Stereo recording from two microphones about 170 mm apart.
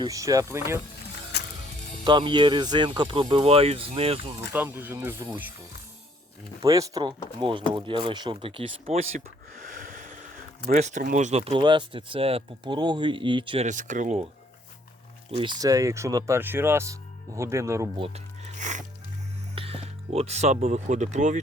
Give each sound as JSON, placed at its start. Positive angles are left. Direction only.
{"t": 0.0, "sound": "speech", "side_deg": -20}
{"t": 2.0, "sound": "speech", "side_deg": -30}
{"t": 4.5, "sound": "speech", "side_deg": -10}
{"t": 6.6, "sound": "speech", "side_deg": -20}
{"t": 9.5, "sound": "speech", "side_deg": -50}
{"t": 13.7, "sound": "speech", "side_deg": -50}
{"t": 15.4, "sound": "speech", "side_deg": -25}
{"t": 18.0, "sound": "music", "side_deg": -40}
{"t": 19.5, "sound": "speech", "side_deg": -35}